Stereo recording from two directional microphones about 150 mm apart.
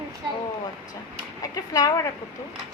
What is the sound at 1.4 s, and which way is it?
Speech, 25° left (ahead or behind).